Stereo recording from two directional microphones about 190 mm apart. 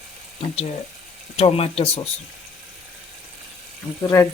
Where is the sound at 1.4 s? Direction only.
35° left (ahead or behind).